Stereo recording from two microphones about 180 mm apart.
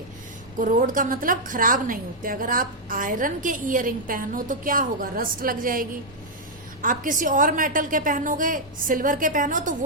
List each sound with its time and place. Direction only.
0.6 s a woman's voice: 50° right (ahead or behind)
6.8 s a woman's voice: 45° right (ahead or behind)